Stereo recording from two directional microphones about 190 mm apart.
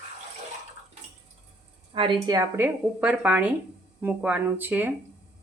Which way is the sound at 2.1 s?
20° right (ahead or behind).